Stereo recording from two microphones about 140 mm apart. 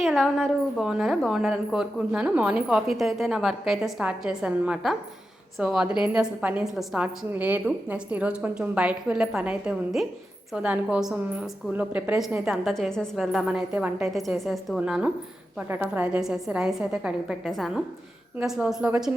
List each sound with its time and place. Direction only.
0.0 s a woman's voice: centre (ahead or behind)